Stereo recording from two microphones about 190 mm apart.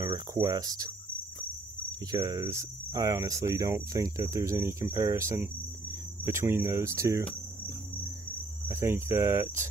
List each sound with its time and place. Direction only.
0.0 s speech: 20° right (ahead or behind)
2.0 s speech: 20° right (ahead or behind)
8.6 s speech: 15° right (ahead or behind)